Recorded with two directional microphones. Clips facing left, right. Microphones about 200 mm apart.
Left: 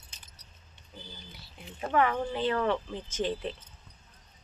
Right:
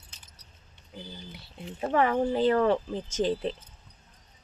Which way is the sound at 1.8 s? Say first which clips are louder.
Right 3 dB; 30° right (ahead or behind).